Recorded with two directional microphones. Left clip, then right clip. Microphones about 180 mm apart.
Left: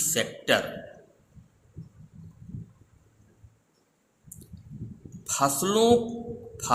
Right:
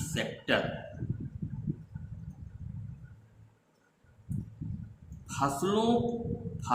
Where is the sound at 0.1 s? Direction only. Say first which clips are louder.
Left 5 dB; 55° left (ahead or behind).